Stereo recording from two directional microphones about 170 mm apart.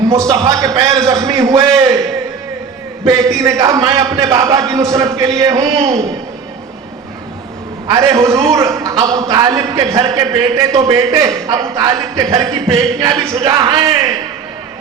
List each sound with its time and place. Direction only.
0.1 s a man's voice: 20° right (ahead or behind)
3.1 s a man's voice: 20° right (ahead or behind)
7.9 s a man's voice: 20° right (ahead or behind)